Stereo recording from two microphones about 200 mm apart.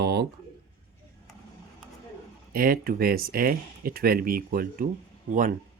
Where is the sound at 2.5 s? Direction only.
45° right (ahead or behind).